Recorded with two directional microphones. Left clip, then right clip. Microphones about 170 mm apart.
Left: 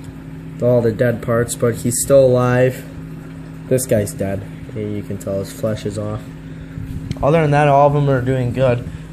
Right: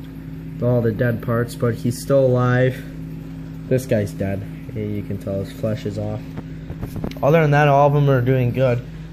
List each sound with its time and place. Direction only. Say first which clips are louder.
0.6 s speech: left 5 dB; 10° left (ahead or behind)
4.2 s speech: left 3 dB; 10° left (ahead or behind)
7.1 s speech: left 1 dB; 10° left (ahead or behind)